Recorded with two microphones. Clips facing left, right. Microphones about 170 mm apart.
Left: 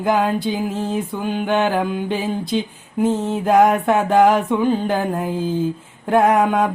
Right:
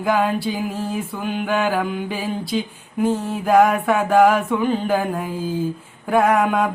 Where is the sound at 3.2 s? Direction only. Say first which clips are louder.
Left 1 dB; 20° left (ahead or behind).